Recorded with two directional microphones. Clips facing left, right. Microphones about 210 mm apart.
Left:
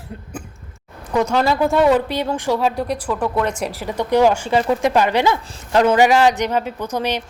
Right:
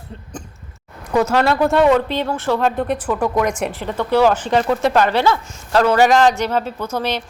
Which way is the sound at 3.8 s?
15° left (ahead or behind).